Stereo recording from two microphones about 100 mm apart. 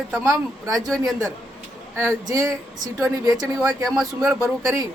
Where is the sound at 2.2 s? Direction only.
35° right (ahead or behind).